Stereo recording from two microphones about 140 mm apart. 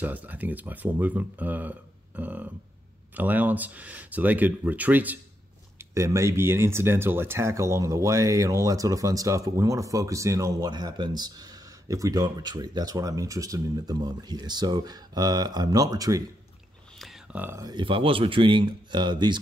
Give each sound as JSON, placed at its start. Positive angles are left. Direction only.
{"t": 0.0, "sound": "speech", "side_deg": -10}
{"t": 17.0, "sound": "a sound", "side_deg": 0}
{"t": 17.4, "sound": "speech", "side_deg": -15}
{"t": 17.6, "sound": "speech", "side_deg": -35}